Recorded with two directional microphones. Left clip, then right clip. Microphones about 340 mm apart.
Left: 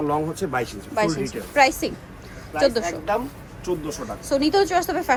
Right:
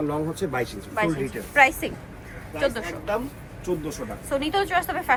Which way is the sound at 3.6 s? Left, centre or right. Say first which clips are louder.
Left 2 dB; centre.